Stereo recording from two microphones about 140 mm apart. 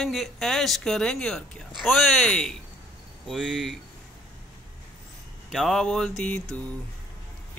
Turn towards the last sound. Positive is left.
turn(degrees=5)  # may be behind; listen again after turning